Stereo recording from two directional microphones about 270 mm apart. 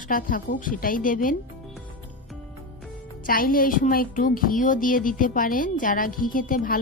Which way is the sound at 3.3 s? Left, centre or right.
Left.